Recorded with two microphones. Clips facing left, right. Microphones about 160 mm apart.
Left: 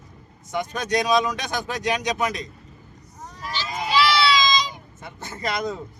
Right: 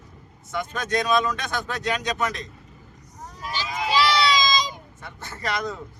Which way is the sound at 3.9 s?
40° right (ahead or behind).